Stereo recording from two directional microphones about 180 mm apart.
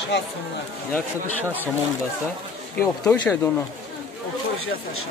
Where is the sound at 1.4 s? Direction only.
10° right (ahead or behind).